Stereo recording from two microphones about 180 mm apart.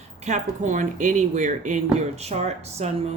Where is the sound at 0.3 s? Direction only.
45° right (ahead or behind).